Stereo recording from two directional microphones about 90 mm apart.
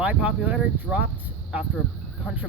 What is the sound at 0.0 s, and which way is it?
Speech, 15° right (ahead or behind).